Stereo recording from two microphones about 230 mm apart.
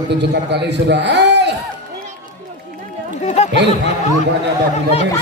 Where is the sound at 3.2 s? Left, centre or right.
Left.